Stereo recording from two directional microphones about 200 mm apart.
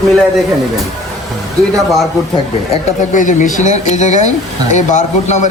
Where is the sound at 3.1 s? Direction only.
40° left (ahead or behind).